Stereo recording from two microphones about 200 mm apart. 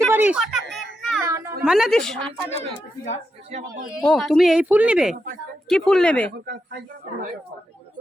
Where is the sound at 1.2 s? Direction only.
15° right (ahead or behind).